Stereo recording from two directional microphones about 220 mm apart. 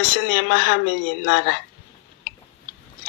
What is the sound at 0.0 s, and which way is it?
Speech, 55° left (ahead or behind).